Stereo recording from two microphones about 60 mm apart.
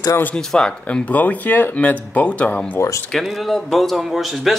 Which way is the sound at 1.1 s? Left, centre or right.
Left.